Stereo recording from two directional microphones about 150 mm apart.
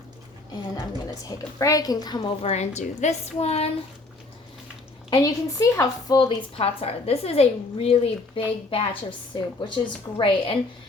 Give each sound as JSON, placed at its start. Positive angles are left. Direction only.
{"t": 1.1, "sound": "a woman's voice", "side_deg": 20}
{"t": 2.4, "sound": "a woman's voice", "side_deg": 45}
{"t": 5.1, "sound": "a woman's voice", "side_deg": 20}